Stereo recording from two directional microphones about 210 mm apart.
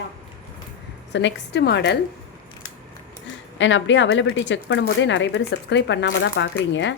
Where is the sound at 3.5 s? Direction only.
60° left (ahead or behind).